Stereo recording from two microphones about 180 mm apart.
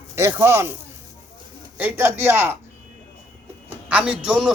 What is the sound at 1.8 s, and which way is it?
Speech, 10° right (ahead or behind).